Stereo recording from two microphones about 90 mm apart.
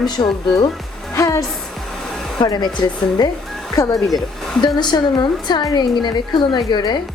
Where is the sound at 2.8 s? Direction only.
40° left (ahead or behind).